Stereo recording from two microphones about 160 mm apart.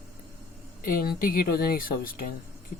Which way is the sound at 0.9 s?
65° left (ahead or behind).